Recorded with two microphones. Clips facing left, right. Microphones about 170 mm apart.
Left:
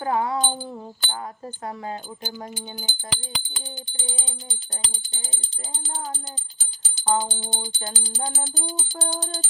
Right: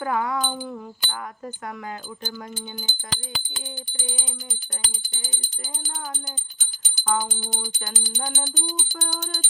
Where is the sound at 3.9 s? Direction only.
25° left (ahead or behind).